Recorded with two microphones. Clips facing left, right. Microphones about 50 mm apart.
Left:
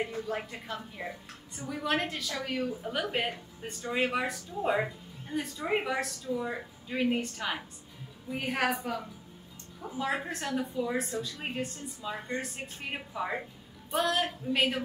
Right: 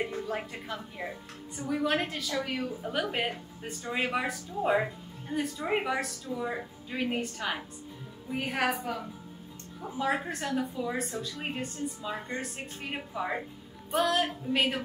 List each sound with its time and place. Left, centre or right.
0.0 s a woman's voice: centre